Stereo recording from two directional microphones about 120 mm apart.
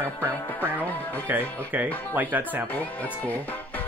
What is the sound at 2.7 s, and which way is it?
Speech, 15° left (ahead or behind).